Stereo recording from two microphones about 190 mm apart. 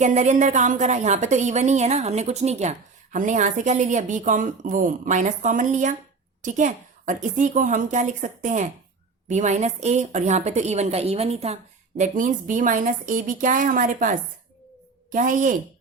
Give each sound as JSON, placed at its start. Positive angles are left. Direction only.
{"t": 0.0, "sound": "a woman's voice", "side_deg": -40}